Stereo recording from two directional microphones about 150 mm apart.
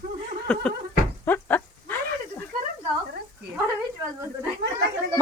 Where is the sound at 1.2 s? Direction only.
15° left (ahead or behind).